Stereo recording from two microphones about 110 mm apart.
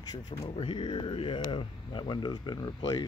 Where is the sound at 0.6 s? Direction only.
50° left (ahead or behind).